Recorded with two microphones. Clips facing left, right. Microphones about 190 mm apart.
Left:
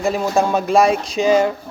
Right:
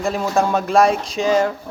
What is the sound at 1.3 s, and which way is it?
Speech, 15° left (ahead or behind).